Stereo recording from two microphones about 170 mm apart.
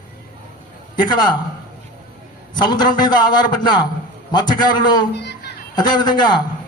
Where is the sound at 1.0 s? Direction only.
25° left (ahead or behind).